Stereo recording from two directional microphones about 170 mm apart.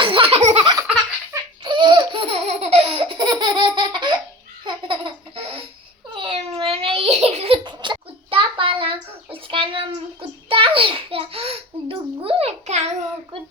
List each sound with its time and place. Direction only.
0.0 s laughter: 30° right (ahead or behind)
1.3 s laughter: 25° right (ahead or behind)
6.1 s baby cry: 35° right (ahead or behind)